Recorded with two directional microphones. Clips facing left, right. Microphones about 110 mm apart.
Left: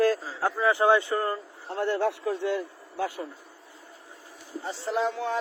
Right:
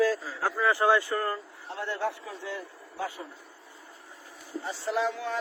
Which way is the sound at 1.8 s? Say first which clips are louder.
Left 6 dB; 60° left (ahead or behind).